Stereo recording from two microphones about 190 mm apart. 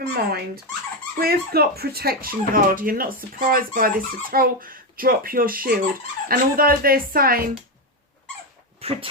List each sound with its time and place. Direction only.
0.1 s speech: 55° right (ahead or behind)
8.8 s speech: 30° right (ahead or behind)